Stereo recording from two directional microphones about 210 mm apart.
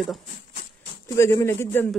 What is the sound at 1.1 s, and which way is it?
Speech, 15° left (ahead or behind).